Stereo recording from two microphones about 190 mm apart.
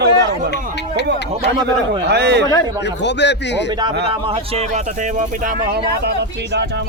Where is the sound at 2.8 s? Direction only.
65° left (ahead or behind).